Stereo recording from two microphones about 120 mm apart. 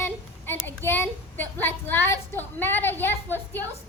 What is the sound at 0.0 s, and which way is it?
Child singing, 20° left (ahead or behind).